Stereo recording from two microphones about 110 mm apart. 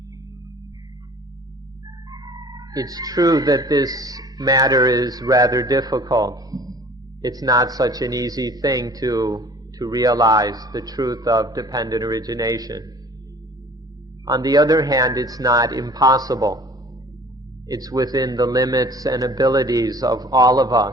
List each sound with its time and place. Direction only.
2.0 s a man's voice: 35° right (ahead or behind)
14.3 s a man's voice: 35° right (ahead or behind)
17.7 s a man's voice: 35° right (ahead or behind)